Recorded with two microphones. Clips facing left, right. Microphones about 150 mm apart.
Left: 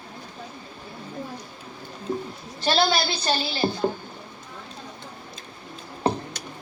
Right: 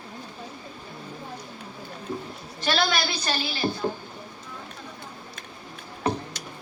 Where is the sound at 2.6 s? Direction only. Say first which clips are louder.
Left 3 dB; 30° left (ahead or behind).